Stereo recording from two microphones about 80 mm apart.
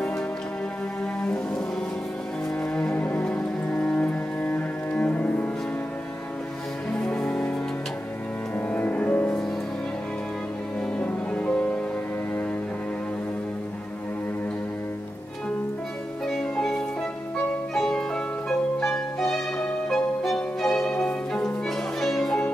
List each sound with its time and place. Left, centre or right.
1.2 s music: centre
2.7 s music: centre
7.2 s music: centre
8.5 s music: centre
11.0 s music: centre
16.5 s music: centre